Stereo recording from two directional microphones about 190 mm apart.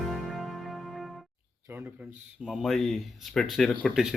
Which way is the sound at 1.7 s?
10° right (ahead or behind).